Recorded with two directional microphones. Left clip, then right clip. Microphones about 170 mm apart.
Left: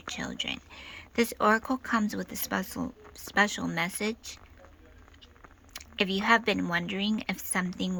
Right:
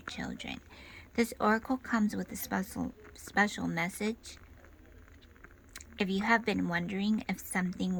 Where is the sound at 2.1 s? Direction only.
40° right (ahead or behind).